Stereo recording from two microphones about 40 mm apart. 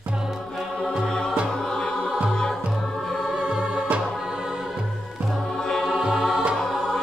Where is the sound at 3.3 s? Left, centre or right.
Right.